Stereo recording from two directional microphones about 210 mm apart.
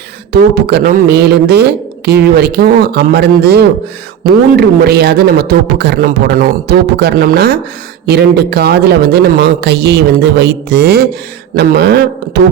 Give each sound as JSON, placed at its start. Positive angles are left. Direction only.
{"t": 0.3, "sound": "a man's voice", "side_deg": -50}